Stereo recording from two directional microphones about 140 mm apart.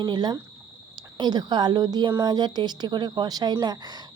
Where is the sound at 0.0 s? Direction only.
30° right (ahead or behind).